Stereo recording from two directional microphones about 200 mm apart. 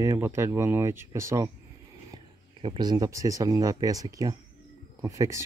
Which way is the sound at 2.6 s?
25° right (ahead or behind).